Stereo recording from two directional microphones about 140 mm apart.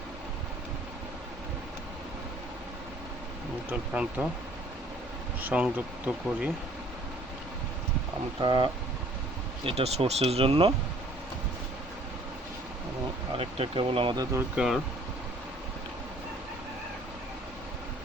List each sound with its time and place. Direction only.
3.7 s speech: 10° right (ahead or behind)
5.4 s speech: 10° right (ahead or behind)
8.4 s speech: 35° right (ahead or behind)
13.3 s speech: 40° right (ahead or behind)
14.5 s speech: 5° right (ahead or behind)